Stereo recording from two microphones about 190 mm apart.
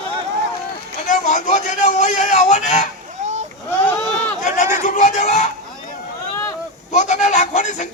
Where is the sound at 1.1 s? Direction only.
40° left (ahead or behind).